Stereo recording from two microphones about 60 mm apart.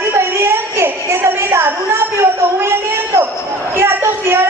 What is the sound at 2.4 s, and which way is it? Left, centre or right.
Speech, right.